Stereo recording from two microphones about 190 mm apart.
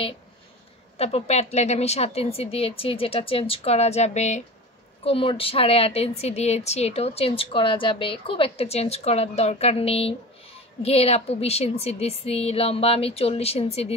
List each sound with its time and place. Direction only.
0.9 s a woman's voice: 35° left (ahead or behind)